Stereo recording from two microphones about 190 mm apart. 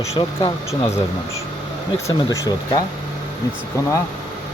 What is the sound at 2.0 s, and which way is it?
Speech, 15° left (ahead or behind).